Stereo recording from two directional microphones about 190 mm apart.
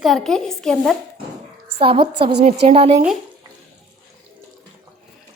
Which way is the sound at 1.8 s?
30° right (ahead or behind).